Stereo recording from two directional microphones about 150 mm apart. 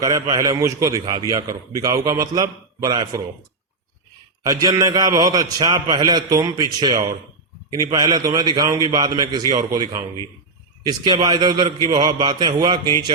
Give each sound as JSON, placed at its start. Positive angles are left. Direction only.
{"t": 0.0, "sound": "a man's voice", "side_deg": -20}
{"t": 4.4, "sound": "a man's voice", "side_deg": -20}